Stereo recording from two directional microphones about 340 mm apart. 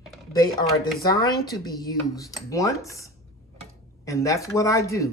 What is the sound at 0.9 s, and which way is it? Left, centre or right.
Speech, centre.